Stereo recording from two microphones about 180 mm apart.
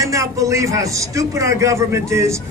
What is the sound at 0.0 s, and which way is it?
A man's voice, 20° right (ahead or behind).